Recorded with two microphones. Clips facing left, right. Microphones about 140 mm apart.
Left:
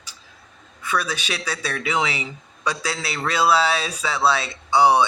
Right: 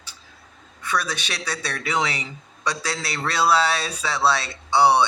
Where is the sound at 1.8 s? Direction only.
10° left (ahead or behind).